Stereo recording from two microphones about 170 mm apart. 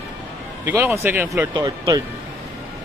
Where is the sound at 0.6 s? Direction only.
15° right (ahead or behind).